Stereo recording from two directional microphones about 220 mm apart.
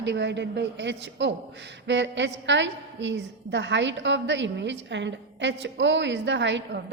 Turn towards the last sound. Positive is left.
turn(degrees=-55)  # may be behind; listen again after turning